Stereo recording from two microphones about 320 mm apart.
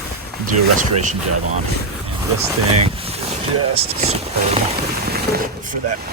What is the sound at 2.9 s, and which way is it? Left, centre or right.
Speech, centre.